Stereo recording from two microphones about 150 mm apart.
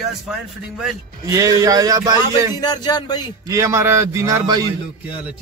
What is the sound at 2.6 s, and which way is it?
Music, 25° left (ahead or behind).